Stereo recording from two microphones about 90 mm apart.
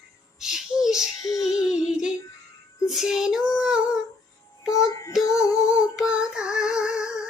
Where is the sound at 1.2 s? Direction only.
40° left (ahead or behind).